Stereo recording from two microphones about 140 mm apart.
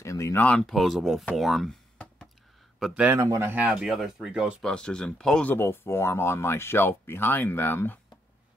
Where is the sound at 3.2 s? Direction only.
20° right (ahead or behind); by 8.0 s 15° left (ahead or behind).